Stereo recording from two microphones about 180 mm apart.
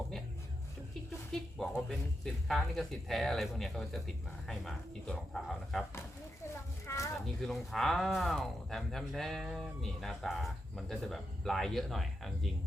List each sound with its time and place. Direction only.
1.3 s speech: centre (ahead or behind)
6.8 s a sound: 15° left (ahead or behind)
7.4 s speech: centre (ahead or behind)